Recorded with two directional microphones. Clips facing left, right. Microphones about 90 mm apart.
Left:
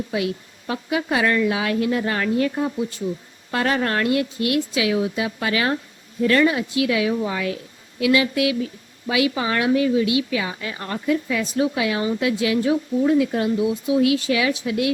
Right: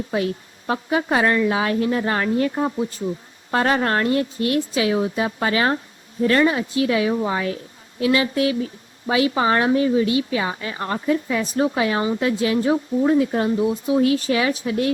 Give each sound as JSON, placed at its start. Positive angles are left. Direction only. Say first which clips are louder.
{"t": 0.7, "sound": "a woman's voice", "louder": "right 2 dB", "side_deg": -35}
{"t": 3.5, "sound": "a woman's voice", "louder": "right 2 dB", "side_deg": -35}